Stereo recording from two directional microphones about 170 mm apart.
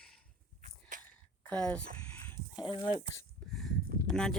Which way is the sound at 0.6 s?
50° right (ahead or behind).